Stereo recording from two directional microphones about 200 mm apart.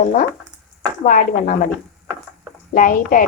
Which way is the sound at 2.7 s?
40° left (ahead or behind).